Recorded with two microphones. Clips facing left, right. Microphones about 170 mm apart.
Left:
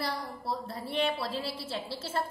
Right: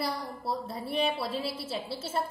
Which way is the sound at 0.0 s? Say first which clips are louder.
Right 2 dB; 5° right (ahead or behind).